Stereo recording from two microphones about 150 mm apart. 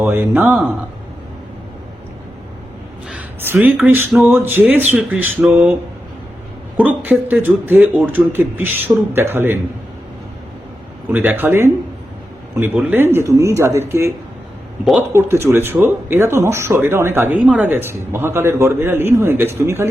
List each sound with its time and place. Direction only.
0.0 s speech: 15° right (ahead or behind)
3.1 s speech: 10° right (ahead or behind)
6.7 s speech: 10° right (ahead or behind)
11.3 s speech: 15° right (ahead or behind)
12.7 s speech: 15° right (ahead or behind)
15.1 s speech: 15° right (ahead or behind)